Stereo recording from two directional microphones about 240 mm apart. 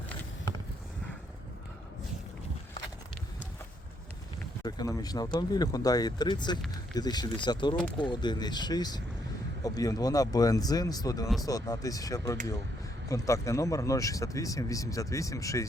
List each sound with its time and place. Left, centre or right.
4.6 s speech: centre